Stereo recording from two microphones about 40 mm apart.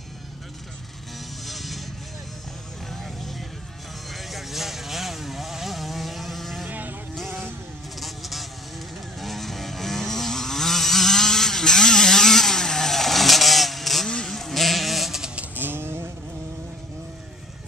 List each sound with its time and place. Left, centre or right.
1.4 s vehicle: centre
2.9 s vehicle: centre
6.7 s vehicle: right
8.0 s insect: centre
9.2 s vehicle: centre
15.5 s a sound: right